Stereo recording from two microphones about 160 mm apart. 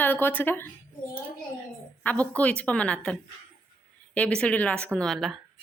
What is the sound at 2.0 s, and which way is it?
A woman's voice, 10° left (ahead or behind).